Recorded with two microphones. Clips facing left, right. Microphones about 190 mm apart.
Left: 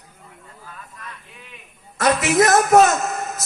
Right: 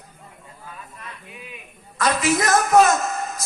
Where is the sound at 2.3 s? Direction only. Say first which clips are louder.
Left 5 dB; 65° left (ahead or behind).